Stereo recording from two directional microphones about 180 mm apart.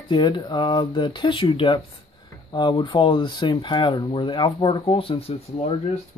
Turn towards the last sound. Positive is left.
turn(degrees=35)  # may be behind; listen again after turning